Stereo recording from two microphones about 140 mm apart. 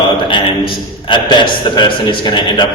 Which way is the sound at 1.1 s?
35° left (ahead or behind).